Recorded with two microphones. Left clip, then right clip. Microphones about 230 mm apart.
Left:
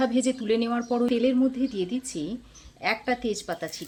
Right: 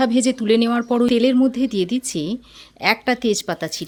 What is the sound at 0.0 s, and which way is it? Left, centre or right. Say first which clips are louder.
Speech: right 7 dB; right.